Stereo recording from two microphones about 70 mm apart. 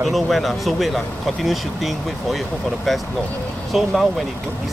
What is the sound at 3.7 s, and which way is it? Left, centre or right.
Speech, centre.